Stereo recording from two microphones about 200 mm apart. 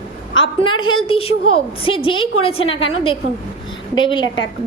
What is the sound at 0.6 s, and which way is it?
A woman's voice, 25° left (ahead or behind).